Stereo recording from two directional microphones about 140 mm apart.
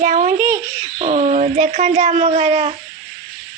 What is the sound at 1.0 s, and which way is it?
Speech, 50° right (ahead or behind).